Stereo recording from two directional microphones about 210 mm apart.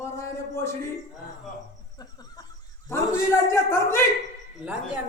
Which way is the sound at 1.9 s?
20° left (ahead or behind).